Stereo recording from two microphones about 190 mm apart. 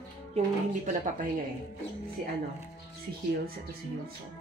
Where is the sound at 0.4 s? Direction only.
35° right (ahead or behind).